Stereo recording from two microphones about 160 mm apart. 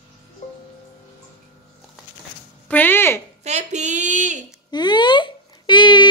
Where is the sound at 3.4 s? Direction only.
45° right (ahead or behind).